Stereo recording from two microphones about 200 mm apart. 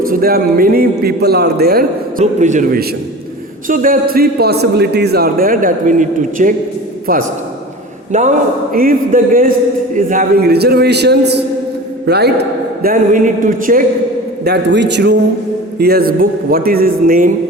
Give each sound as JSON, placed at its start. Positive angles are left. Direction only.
{"t": 0.0, "sound": "a man's voice", "side_deg": -45}
{"t": 2.2, "sound": "a man's voice", "side_deg": -35}
{"t": 8.1, "sound": "a man's voice", "side_deg": -35}
{"t": 14.4, "sound": "a man's voice", "side_deg": -55}